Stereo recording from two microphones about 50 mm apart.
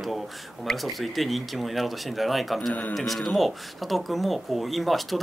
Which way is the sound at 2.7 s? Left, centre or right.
Left.